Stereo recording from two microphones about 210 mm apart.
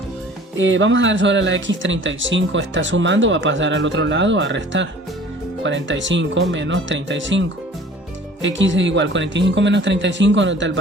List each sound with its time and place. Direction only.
0.5 s speech: 65° right (ahead or behind)